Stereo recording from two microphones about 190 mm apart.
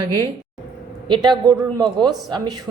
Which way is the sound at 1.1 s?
25° right (ahead or behind).